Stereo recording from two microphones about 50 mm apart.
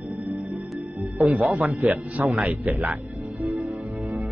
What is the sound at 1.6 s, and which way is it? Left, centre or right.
A man's voice, right.